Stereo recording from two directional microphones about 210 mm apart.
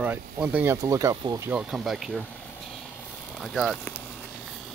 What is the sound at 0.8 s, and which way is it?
Speech, 15° right (ahead or behind).